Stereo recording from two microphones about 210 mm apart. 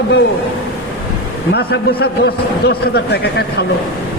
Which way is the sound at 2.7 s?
50° left (ahead or behind).